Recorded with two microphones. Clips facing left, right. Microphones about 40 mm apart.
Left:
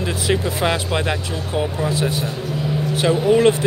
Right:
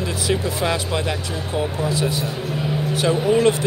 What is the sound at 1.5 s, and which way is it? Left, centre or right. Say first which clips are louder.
Speech: left 1 dB; left.